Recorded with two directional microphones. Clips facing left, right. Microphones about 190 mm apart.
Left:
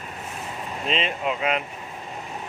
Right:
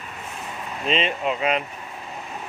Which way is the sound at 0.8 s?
Centre (ahead or behind).